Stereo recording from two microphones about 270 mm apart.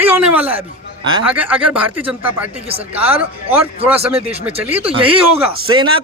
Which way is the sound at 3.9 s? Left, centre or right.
Right.